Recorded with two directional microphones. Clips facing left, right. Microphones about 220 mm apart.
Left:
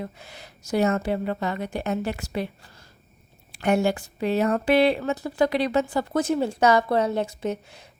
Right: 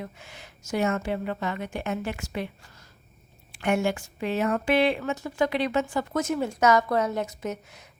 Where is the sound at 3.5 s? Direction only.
35° left (ahead or behind).